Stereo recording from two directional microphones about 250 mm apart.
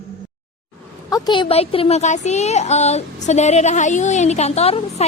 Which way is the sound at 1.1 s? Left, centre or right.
Centre.